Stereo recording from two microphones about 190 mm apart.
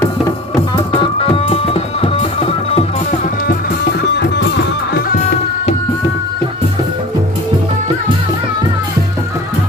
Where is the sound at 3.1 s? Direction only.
45° left (ahead or behind).